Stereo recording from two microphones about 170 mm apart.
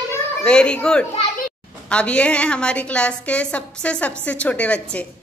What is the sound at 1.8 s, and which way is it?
A woman's voice, 5° left (ahead or behind).